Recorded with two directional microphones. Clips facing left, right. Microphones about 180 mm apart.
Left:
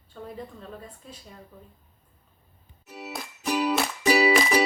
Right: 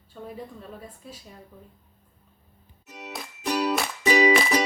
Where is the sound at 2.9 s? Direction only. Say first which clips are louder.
Left 1 dB; 5° left (ahead or behind).